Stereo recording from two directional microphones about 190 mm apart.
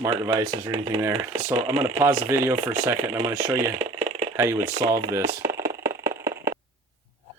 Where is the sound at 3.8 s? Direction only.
35° right (ahead or behind).